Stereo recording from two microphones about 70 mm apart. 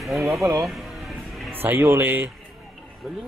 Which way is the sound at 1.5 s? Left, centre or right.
Right.